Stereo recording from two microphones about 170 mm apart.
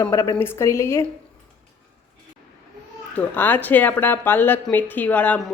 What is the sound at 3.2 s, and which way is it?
A woman's voice, 10° left (ahead or behind).